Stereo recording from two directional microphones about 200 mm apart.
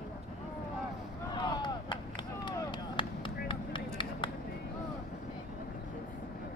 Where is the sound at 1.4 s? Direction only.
20° left (ahead or behind).